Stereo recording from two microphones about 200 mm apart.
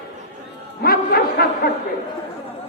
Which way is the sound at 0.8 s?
50° left (ahead or behind).